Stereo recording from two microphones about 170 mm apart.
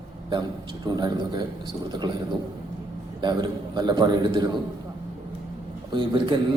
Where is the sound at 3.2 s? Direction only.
25° right (ahead or behind).